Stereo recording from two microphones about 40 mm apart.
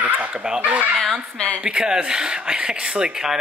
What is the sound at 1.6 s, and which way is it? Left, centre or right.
Speech, right.